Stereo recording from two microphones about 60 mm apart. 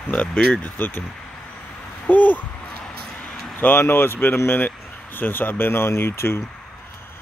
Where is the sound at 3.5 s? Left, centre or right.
Left.